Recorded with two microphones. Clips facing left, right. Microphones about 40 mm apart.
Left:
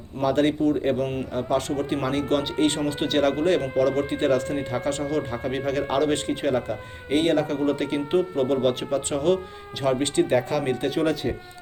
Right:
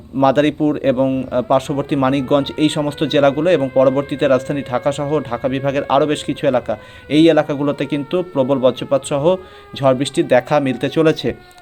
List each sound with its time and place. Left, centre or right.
0.2 s speech: right
2.0 s speech: right
2.2 s speech: right
7.6 s speech: right
11.0 s speech: right